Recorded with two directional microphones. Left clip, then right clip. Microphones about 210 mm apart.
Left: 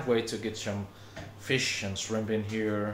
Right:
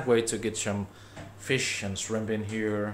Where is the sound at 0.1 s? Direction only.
35° right (ahead or behind).